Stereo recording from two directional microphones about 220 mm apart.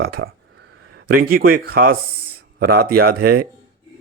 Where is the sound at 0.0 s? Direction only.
45° right (ahead or behind).